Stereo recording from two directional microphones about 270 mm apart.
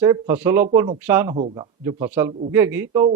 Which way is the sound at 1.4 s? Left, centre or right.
Right.